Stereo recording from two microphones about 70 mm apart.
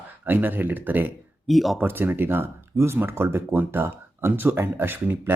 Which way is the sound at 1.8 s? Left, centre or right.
Right.